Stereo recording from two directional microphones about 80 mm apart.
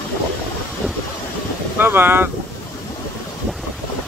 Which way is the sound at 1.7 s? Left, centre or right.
Right.